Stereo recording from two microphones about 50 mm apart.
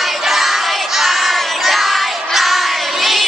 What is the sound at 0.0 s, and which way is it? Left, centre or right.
Child singing, centre.